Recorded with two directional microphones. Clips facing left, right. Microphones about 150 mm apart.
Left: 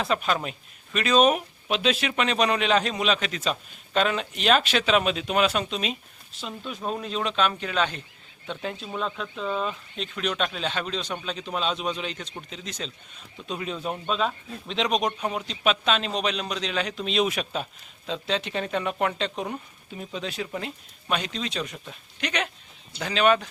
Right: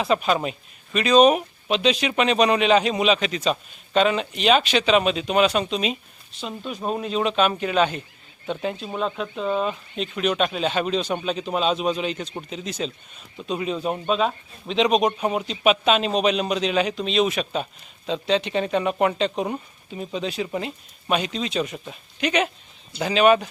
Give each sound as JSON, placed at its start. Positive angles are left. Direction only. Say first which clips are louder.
{"t": 0.0, "sound": "speech", "louder": "right 4 dB", "side_deg": 0}
{"t": 9.2, "sound": "speech", "louder": "right 5 dB", "side_deg": -35}
{"t": 9.6, "sound": "speech", "louder": "right 5 dB", "side_deg": -5}
{"t": 17.0, "sound": "speech", "louder": "right 3 dB", "side_deg": 5}